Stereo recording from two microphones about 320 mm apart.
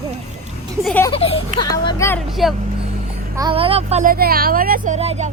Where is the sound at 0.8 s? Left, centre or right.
Centre.